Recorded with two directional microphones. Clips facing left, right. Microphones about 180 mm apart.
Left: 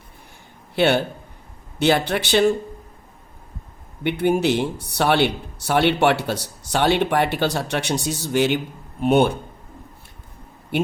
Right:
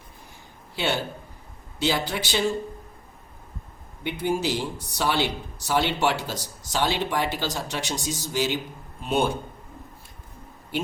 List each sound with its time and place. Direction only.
0.8 s speech: 65° left (ahead or behind)
4.0 s speech: 65° left (ahead or behind)